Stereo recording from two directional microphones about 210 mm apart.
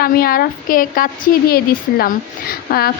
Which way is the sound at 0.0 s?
45° left (ahead or behind).